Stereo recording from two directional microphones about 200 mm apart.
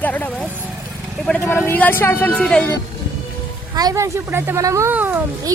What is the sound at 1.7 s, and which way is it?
Speech, 10° left (ahead or behind).